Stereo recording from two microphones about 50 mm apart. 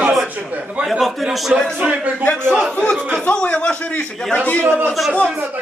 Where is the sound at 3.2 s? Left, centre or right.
Left.